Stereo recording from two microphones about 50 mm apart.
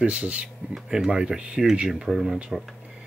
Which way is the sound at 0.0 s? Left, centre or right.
Right.